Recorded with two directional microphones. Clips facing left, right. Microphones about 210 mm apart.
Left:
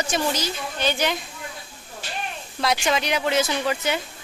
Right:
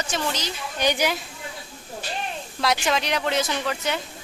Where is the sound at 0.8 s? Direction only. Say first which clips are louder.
Right 1 dB; 15° right (ahead or behind).